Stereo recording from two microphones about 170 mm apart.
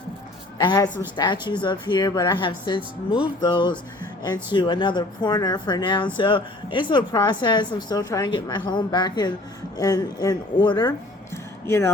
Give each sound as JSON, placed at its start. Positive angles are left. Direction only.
{"t": 0.6, "sound": "speech", "side_deg": 25}
{"t": 11.6, "sound": "speech", "side_deg": 15}